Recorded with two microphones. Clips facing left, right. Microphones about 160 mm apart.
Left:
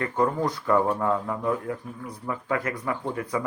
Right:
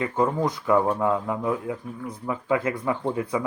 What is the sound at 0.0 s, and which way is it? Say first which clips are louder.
Speech: right 1 dB; 20° right (ahead or behind).